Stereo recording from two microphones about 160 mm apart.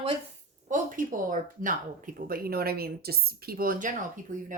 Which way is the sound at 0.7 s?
55° right (ahead or behind).